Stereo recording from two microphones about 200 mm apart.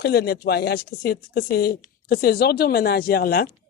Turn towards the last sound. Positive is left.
turn(degrees=45)  # may be behind; listen again after turning